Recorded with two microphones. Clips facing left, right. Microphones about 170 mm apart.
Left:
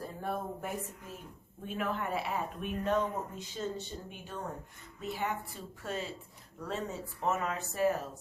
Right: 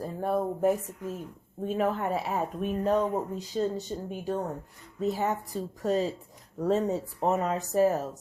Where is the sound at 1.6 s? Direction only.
35° right (ahead or behind).